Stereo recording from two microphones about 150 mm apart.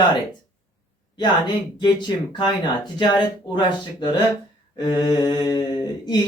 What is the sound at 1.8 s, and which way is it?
Speech, 30° left (ahead or behind).